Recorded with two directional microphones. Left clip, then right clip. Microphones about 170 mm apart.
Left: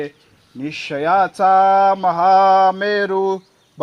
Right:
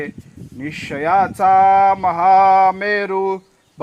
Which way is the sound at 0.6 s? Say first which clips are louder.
Left 1 dB; 65° left (ahead or behind).